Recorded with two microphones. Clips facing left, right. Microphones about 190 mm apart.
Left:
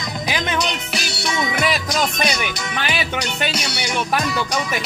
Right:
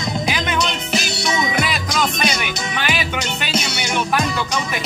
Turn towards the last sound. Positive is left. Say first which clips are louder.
# right 1 dB
turn(degrees=-25)  # may be behind; listen again after turning